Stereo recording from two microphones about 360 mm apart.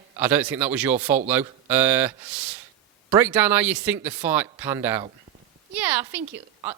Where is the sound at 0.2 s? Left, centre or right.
Centre.